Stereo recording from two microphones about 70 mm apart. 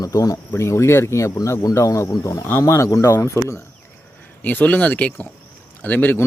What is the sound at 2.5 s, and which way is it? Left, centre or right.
Speech, left.